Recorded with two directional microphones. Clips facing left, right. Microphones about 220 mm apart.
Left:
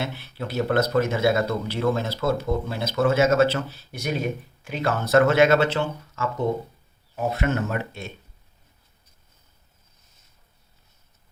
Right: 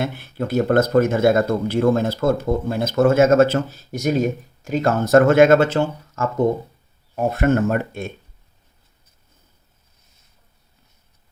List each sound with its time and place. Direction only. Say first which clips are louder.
0.0 s speech: right 6 dB; 50° right (ahead or behind)